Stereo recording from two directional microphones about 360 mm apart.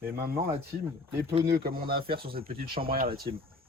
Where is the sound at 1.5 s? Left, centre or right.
Right.